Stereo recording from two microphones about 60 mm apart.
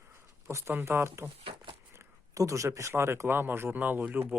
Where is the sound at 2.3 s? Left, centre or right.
Right.